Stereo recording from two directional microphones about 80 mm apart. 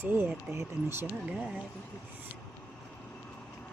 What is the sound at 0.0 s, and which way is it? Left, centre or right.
Speech, right.